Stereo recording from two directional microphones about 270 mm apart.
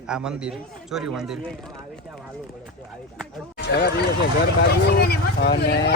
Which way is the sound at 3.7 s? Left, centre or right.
Left.